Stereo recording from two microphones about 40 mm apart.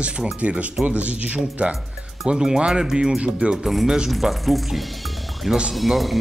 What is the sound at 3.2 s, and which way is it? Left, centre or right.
Speech, right.